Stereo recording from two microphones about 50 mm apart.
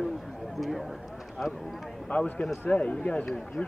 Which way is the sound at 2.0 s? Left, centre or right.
Left.